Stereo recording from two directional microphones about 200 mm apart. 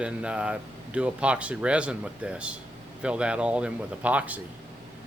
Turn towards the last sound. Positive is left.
turn(degrees=-5)  # may be behind; listen again after turning